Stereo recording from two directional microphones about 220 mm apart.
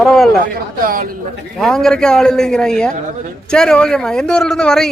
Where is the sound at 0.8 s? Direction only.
40° right (ahead or behind).